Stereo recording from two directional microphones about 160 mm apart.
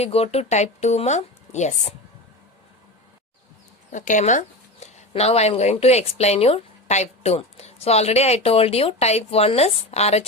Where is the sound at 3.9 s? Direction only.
50° left (ahead or behind).